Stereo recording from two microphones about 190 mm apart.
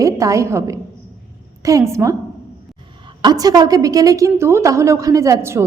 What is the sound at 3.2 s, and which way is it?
A woman's voice, 20° right (ahead or behind).